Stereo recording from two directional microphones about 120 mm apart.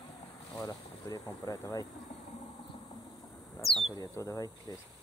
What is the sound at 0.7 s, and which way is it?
Speech, 30° left (ahead or behind).